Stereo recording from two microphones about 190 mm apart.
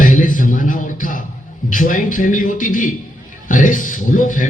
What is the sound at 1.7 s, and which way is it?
Speech, 45° left (ahead or behind).